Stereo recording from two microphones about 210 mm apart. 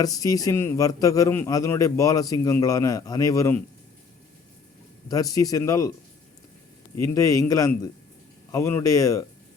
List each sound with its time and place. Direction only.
0.0 s a man's voice: 15° left (ahead or behind)
5.0 s a man's voice: 15° left (ahead or behind)
7.0 s a man's voice: 15° left (ahead or behind)